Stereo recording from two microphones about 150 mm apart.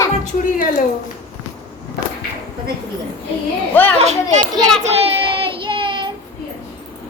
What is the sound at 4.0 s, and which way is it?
Speech, 50° right (ahead or behind).